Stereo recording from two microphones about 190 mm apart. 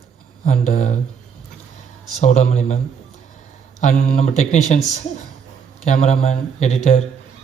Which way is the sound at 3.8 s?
40° left (ahead or behind).